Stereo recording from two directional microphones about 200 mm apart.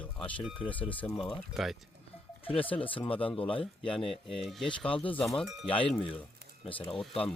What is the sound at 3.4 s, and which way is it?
Speech, 25° left (ahead or behind).